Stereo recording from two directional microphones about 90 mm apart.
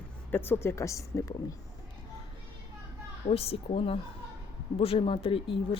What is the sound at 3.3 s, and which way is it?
Speech, 90° left.